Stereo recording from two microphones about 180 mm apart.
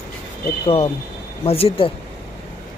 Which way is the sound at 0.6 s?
35° left (ahead or behind).